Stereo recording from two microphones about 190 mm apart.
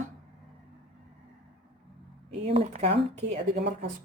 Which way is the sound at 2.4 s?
30° right (ahead or behind).